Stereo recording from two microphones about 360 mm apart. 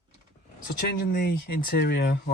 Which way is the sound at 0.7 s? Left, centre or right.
Left.